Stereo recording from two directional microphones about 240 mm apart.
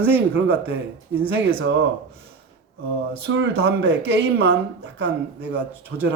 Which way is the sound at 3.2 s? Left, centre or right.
Right.